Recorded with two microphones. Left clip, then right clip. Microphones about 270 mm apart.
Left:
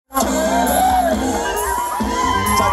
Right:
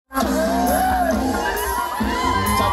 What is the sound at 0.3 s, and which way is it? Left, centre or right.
Music, centre.